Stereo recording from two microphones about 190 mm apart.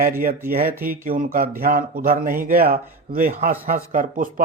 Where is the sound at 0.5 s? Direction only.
50° right (ahead or behind).